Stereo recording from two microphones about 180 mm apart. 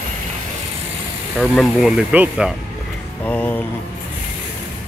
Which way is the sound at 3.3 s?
10° left (ahead or behind).